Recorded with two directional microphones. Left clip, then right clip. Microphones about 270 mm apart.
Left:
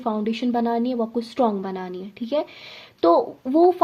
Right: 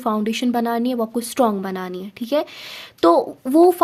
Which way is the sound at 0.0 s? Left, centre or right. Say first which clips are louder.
Right 3 dB; right.